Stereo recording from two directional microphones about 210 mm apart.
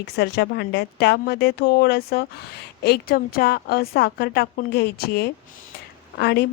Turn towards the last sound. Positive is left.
turn(degrees=50)  # may be behind; listen again after turning